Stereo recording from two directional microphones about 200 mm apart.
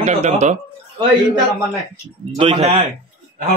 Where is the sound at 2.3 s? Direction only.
30° right (ahead or behind).